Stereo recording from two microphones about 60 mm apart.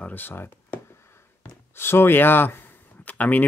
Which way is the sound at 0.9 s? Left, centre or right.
Left.